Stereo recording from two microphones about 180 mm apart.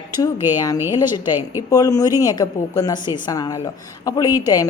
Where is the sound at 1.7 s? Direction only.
20° left (ahead or behind).